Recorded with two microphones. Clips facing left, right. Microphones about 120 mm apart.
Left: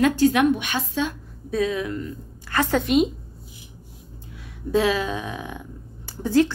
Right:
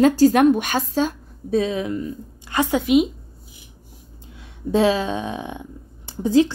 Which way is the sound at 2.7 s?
5° right (ahead or behind).